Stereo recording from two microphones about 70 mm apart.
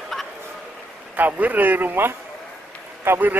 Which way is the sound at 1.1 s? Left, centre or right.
Right.